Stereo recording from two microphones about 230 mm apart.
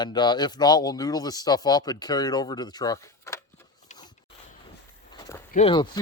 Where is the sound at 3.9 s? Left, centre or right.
Left.